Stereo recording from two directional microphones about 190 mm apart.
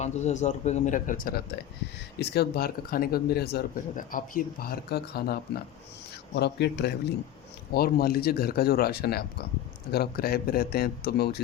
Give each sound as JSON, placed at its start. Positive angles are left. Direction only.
{"t": 0.0, "sound": "speech", "side_deg": 35}